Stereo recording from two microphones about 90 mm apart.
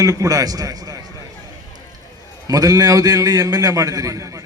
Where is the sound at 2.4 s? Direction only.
45° right (ahead or behind).